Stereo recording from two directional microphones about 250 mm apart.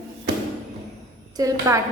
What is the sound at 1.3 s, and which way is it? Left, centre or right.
Speech, centre.